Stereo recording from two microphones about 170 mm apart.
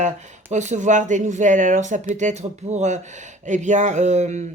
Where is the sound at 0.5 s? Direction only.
45° right (ahead or behind).